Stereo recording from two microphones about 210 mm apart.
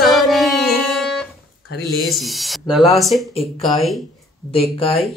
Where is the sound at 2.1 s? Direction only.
Centre (ahead or behind).